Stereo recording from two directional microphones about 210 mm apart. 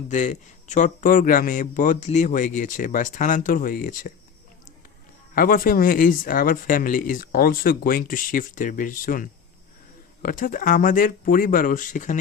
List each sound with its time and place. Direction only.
0.1 s speech: 35° left (ahead or behind)
5.3 s speech: 40° left (ahead or behind)